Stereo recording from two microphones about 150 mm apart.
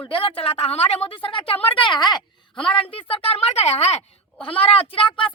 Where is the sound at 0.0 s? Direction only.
35° left (ahead or behind).